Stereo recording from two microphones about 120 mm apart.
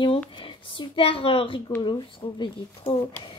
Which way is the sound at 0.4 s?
45° left (ahead or behind).